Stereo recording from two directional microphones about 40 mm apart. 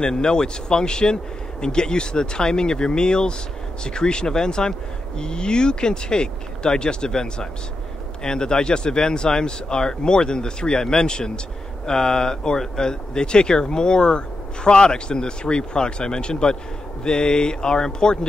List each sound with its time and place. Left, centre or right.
0.0 s speech: centre